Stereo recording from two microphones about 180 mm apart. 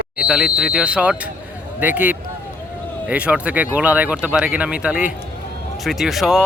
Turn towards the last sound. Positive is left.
turn(degrees=0)  # may be behind; listen again after turning